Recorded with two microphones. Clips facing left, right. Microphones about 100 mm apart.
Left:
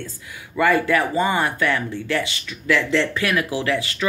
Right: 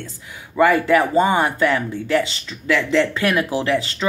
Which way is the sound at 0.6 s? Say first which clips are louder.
Right 3 dB; 20° right (ahead or behind).